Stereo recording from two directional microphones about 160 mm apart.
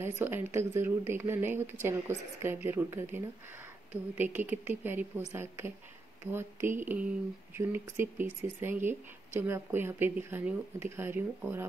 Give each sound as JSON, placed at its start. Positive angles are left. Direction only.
{"t": 0.2, "sound": "a woman's voice", "side_deg": -15}